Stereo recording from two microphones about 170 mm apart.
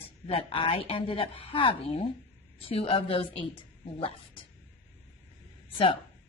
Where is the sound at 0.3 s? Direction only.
30° left (ahead or behind).